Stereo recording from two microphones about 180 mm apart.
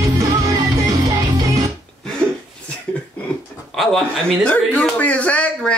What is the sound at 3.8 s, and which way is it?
A man's voice, centre (ahead or behind).